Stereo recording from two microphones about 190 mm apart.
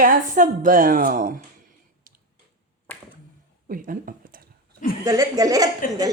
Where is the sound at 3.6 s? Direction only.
45° right (ahead or behind).